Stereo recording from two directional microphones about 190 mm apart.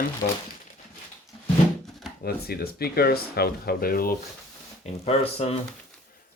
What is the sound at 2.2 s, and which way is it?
Speech, 55° left (ahead or behind).